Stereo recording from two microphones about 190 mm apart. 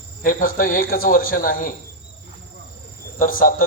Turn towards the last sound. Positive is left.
turn(degrees=45)  # may be behind; listen again after turning